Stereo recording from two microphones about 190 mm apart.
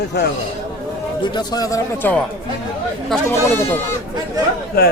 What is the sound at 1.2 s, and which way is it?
Speech, 20° left (ahead or behind).